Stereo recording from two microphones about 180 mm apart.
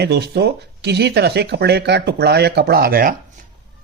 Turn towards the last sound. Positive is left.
turn(degrees=-55)  # may be behind; listen again after turning